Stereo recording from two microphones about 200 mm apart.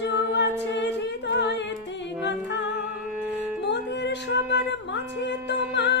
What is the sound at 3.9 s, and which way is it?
Music, 60° left (ahead or behind).